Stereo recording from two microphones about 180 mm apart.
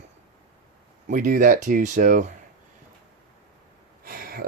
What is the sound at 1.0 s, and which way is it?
Speech, 45° right (ahead or behind).